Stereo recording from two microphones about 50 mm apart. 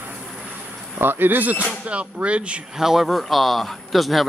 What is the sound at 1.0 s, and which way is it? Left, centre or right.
Speech, right.